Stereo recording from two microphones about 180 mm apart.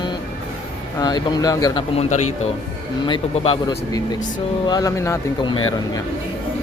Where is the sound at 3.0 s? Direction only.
30° left (ahead or behind).